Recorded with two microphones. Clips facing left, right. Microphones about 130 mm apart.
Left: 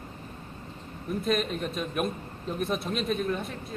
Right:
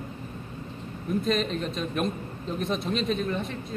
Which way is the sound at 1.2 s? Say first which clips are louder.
Left 1 dB; 5° left (ahead or behind).